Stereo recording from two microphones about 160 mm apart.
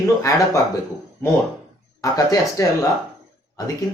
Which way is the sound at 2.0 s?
20° left (ahead or behind).